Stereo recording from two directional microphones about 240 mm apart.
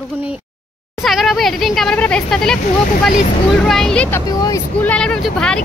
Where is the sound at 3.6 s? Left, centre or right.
Centre.